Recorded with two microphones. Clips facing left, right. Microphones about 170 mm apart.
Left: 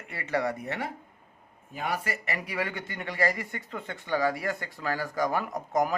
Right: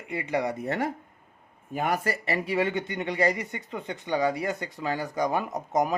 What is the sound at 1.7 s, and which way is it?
Speech, 45° right (ahead or behind).